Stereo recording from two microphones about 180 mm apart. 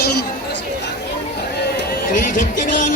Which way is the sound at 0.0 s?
65° left (ahead or behind).